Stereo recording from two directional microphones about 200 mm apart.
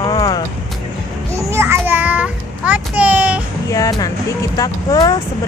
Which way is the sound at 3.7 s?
15° left (ahead or behind).